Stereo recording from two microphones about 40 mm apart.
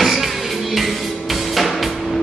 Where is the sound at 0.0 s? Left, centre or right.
Centre.